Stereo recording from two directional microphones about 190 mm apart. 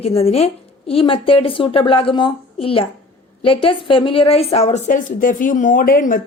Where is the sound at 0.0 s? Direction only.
30° left (ahead or behind).